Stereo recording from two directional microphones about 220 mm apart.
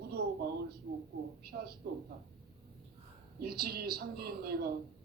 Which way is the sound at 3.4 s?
45° right (ahead or behind).